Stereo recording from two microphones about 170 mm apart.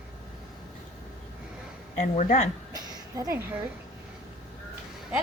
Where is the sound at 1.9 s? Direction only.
45° left (ahead or behind).